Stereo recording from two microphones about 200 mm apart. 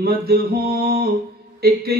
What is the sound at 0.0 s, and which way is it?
Speech, 50° right (ahead or behind).